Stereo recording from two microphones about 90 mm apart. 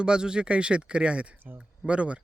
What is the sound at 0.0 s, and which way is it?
Speech, 10° right (ahead or behind).